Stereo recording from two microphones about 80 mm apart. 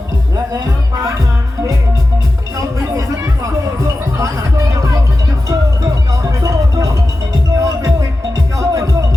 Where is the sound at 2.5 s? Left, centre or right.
Right.